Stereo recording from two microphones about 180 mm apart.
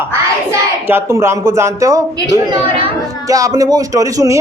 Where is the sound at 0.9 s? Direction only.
15° right (ahead or behind).